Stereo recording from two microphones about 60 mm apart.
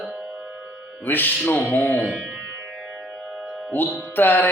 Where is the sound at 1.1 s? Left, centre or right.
Left.